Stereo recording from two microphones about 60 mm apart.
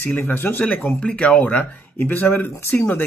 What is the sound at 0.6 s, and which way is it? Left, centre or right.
Speech, centre.